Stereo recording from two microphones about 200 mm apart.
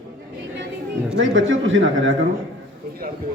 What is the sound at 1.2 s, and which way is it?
Speech, 75° right (ahead or behind).